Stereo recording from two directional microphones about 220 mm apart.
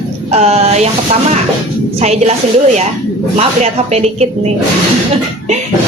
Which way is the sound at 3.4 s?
30° right (ahead or behind).